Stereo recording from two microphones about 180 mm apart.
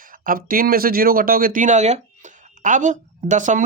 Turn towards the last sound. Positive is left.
turn(degrees=-45)  # may be behind; listen again after turning